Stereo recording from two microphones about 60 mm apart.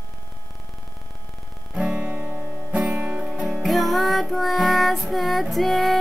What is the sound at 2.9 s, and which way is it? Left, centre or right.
Music, centre.